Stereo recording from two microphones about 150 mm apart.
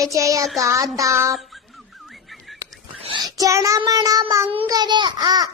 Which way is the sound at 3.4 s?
20° right (ahead or behind).